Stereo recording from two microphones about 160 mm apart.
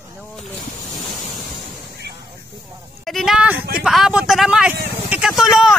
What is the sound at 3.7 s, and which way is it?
Vehicle, 5° right (ahead or behind).